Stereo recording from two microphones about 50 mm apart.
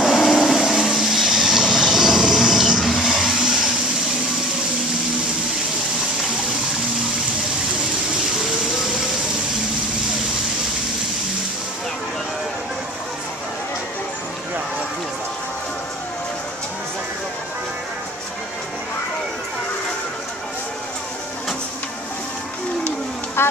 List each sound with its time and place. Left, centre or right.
0.0 s vehicle: centre
3.0 s a sound: centre
23.4 s music: left